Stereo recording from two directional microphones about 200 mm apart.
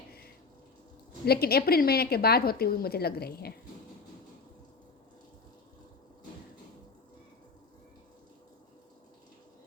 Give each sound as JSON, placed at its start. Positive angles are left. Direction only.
{"t": 1.2, "sound": "a woman's voice", "side_deg": 50}